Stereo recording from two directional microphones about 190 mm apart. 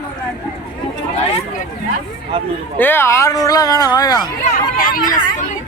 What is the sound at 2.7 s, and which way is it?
Speech, 10° left (ahead or behind).